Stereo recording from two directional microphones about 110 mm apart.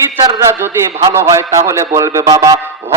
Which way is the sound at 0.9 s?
25° right (ahead or behind).